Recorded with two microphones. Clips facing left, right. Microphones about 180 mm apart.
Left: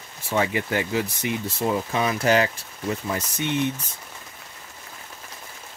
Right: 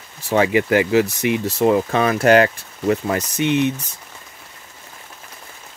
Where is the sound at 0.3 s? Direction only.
90° right.